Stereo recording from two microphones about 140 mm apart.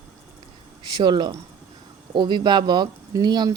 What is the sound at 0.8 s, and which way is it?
Speech, 30° right (ahead or behind).